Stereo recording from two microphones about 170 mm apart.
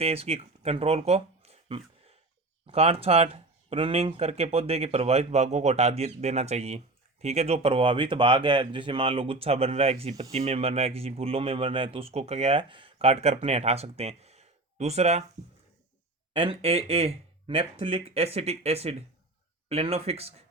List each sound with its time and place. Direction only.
0.0 s speech: 35° right (ahead or behind)
16.3 s speech: 35° right (ahead or behind)